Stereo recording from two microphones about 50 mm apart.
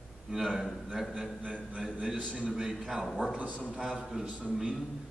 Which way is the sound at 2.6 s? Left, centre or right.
Centre.